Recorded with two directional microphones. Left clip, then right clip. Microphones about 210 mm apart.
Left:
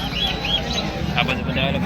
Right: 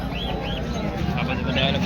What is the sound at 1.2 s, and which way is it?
Speech, centre (ahead or behind).